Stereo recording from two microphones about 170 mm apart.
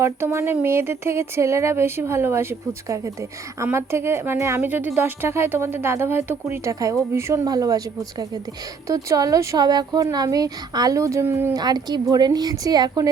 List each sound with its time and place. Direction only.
0.0 s speech: 15° right (ahead or behind)
8.9 s speech: 20° right (ahead or behind)
11.6 s speech: 25° right (ahead or behind)